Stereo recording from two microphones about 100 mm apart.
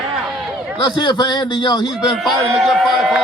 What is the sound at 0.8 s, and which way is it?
A man's voice, 45° left (ahead or behind).